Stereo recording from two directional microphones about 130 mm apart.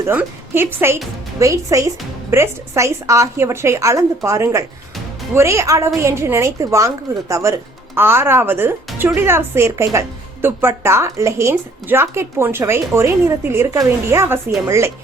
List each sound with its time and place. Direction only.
0.0 s a woman's voice: 15° right (ahead or behind)